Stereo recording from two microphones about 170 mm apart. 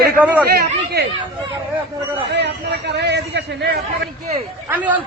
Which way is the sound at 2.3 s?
85° right.